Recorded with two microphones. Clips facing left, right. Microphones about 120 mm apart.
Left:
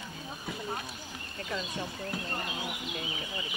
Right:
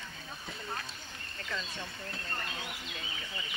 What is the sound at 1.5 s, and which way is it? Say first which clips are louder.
Speech: left 4 dB; 25° left (ahead or behind).